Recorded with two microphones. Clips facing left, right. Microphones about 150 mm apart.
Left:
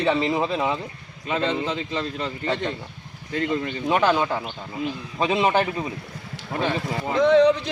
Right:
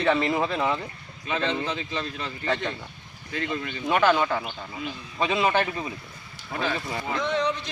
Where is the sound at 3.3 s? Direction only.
30° left (ahead or behind).